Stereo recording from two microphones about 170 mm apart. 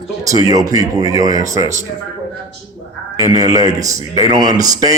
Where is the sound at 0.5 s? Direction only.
20° right (ahead or behind).